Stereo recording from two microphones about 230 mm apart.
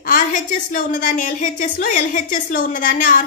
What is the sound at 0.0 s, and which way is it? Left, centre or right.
A woman's voice, left.